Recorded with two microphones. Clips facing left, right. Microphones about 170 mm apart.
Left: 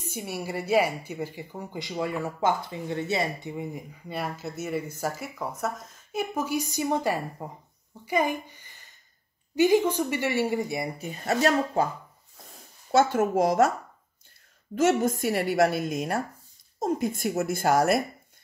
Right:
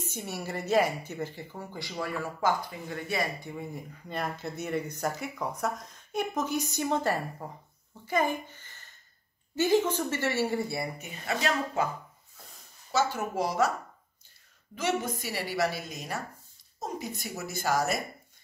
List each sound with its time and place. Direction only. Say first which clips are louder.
0.0 s speech: left 3 dB; 10° left (ahead or behind)
4.1 s a woman's voice: left 1 dB; 5° left (ahead or behind)
11.0 s speech: left 7 dB; 40° left (ahead or behind)
12.9 s a woman's voice: left 7 dB; 50° left (ahead or behind)
14.8 s a woman's voice: left 8 dB; 45° left (ahead or behind)